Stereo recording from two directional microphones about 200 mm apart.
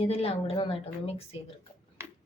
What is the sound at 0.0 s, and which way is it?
A woman's voice, 30° left (ahead or behind).